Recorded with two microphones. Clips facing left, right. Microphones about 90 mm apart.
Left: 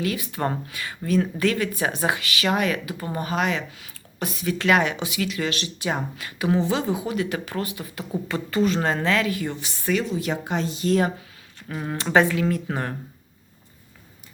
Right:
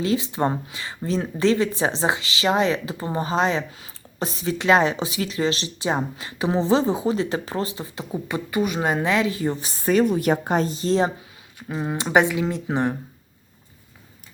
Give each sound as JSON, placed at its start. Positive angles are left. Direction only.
{"t": 0.0, "sound": "speech", "side_deg": -25}
{"t": 10.1, "sound": "a woman's voice", "side_deg": -50}